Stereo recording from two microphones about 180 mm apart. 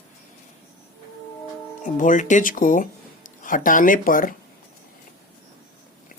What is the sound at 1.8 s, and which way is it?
Speech, 45° left (ahead or behind).